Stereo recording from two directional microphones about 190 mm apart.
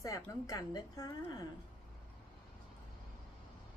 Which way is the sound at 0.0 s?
20° left (ahead or behind).